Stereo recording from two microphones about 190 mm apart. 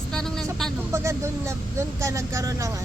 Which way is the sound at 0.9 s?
15° right (ahead or behind).